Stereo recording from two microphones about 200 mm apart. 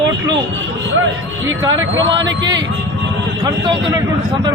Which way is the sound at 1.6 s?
20° right (ahead or behind).